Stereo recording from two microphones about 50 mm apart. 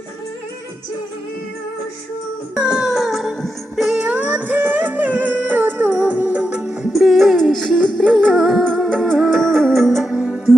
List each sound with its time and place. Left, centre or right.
2.6 s music: centre
2.8 s music: centre
4.0 s music: right
6.4 s music: centre
6.9 s music: centre
10.1 s music: centre